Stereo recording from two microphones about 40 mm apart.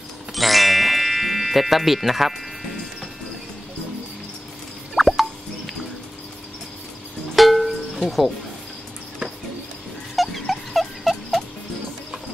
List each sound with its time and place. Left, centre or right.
0.3 s music: centre
4.9 s plop: centre
7.3 s music: centre
10.1 s dog: centre